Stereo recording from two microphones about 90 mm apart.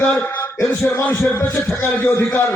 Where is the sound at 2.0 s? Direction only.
25° left (ahead or behind).